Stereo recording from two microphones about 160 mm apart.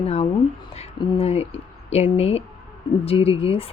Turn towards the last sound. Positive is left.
turn(degrees=35)  # may be behind; listen again after turning